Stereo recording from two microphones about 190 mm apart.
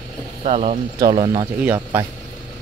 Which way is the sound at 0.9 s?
20° right (ahead or behind).